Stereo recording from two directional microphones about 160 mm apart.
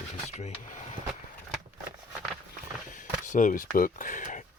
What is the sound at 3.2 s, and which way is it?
Speech, 55° left (ahead or behind).